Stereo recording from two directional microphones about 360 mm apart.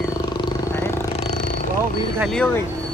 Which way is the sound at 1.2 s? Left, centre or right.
Centre.